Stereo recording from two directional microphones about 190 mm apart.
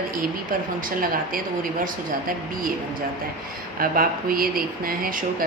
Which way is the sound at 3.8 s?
50° right (ahead or behind).